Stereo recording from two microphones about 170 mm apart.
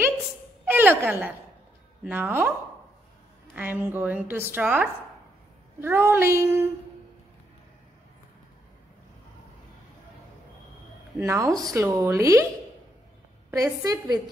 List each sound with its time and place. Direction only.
0.7 s a woman's voice: 10° right (ahead or behind)
3.5 s a woman's voice: 10° right (ahead or behind)
11.1 s a woman's voice: 20° right (ahead or behind)
13.5 s a woman's voice: 20° right (ahead or behind)